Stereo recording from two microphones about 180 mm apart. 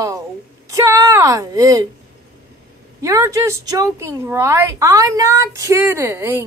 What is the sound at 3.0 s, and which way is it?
A woman's voice, 20° right (ahead or behind).